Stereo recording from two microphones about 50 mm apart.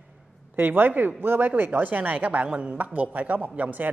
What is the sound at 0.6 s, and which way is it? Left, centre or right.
A woman's voice, right.